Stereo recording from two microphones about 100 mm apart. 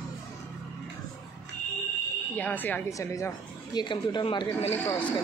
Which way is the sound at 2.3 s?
15° left (ahead or behind).